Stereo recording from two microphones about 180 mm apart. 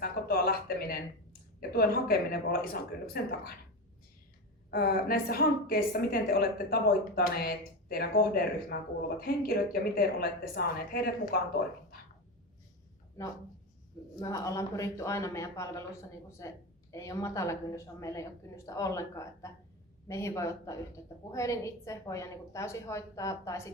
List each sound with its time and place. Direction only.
0.0 s a sound: 55° left (ahead or behind)
1.7 s speech: 55° left (ahead or behind)
4.7 s speech: 55° left (ahead or behind)
14.2 s speech: 20° left (ahead or behind)